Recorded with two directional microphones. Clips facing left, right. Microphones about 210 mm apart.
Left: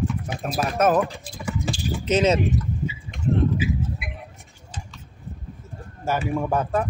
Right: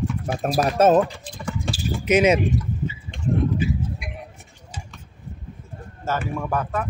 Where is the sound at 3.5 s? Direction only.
5° left (ahead or behind).